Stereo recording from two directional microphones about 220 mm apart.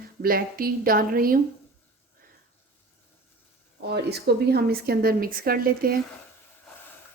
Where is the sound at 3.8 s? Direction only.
50° right (ahead or behind).